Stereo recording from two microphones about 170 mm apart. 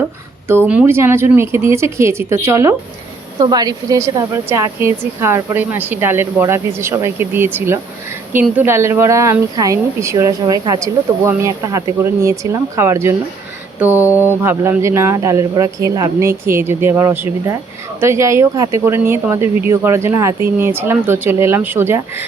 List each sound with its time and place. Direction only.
0.4 s speech: 15° right (ahead or behind)
13.7 s mantra: 10° right (ahead or behind)
14.2 s speech: 15° right (ahead or behind)